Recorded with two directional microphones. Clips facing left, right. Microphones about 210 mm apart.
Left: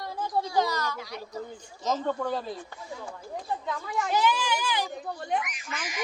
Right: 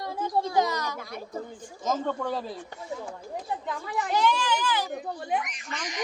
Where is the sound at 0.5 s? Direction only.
20° right (ahead or behind).